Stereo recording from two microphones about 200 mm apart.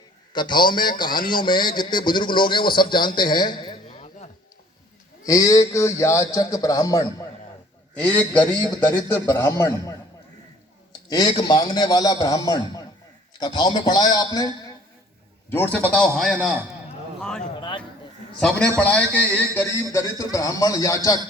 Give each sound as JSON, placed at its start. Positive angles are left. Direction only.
{"t": 0.3, "sound": "a man's voice", "side_deg": 20}
{"t": 5.2, "sound": "speech", "side_deg": 15}
{"t": 7.9, "sound": "speech", "side_deg": 5}
{"t": 11.1, "sound": "a man's voice", "side_deg": 20}
{"t": 17.2, "sound": "a sound", "side_deg": 5}
{"t": 17.6, "sound": "a sound", "side_deg": 25}
{"t": 18.3, "sound": "a man's voice", "side_deg": 5}